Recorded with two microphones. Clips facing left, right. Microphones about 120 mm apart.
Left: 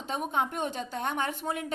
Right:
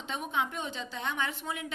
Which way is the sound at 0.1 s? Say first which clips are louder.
Left 3 dB; 45° left (ahead or behind).